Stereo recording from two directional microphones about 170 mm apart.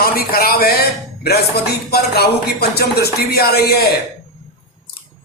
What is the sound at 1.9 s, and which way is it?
Speech, 70° left (ahead or behind).